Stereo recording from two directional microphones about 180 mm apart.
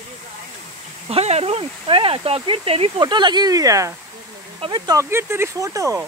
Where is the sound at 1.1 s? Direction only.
35° right (ahead or behind).